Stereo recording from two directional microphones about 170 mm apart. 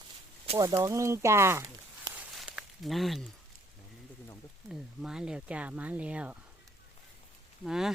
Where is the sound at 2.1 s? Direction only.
5° right (ahead or behind).